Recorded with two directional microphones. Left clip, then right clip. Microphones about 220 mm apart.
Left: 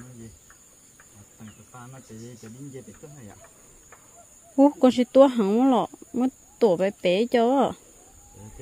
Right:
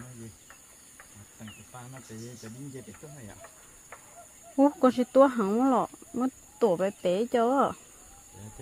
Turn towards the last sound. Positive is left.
turn(degrees=40)  # may be behind; listen again after turning